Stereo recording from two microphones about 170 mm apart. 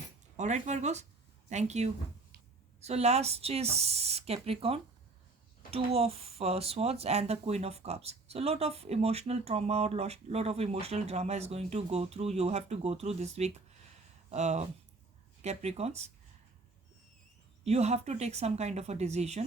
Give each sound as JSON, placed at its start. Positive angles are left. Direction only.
{"t": 0.3, "sound": "speech", "side_deg": -45}
{"t": 17.6, "sound": "speech", "side_deg": -40}